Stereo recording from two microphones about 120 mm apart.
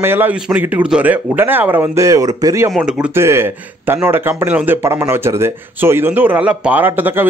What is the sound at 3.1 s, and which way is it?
Speech, 20° right (ahead or behind).